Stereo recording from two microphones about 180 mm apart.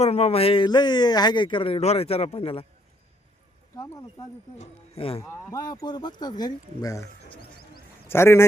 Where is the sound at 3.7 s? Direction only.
15° left (ahead or behind).